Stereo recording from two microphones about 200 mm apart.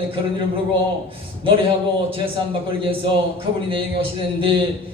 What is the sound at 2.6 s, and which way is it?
A man's voice, 25° right (ahead or behind).